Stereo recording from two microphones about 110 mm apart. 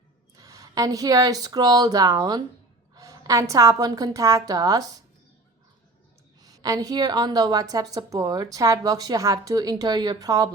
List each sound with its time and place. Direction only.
0.3 s a woman's voice: 35° right (ahead or behind)
6.4 s a woman's voice: 35° right (ahead or behind)